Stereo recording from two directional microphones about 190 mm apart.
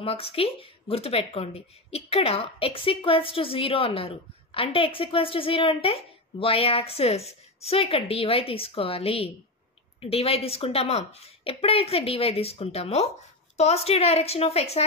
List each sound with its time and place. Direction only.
0.0 s speech: 30° left (ahead or behind)